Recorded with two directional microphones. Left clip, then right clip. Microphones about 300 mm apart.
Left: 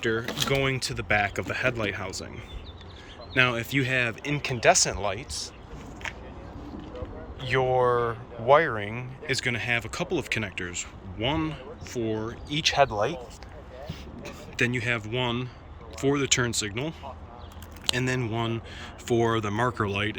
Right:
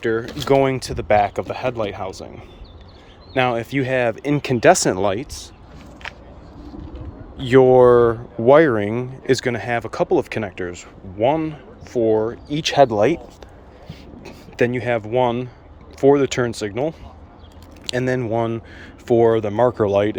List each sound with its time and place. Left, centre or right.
0.0 s speech: centre
3.3 s speech: centre; by 5.3 s right
7.4 s speech: right; by 12.6 s centre
12.6 s speech: right
14.2 s speech: centre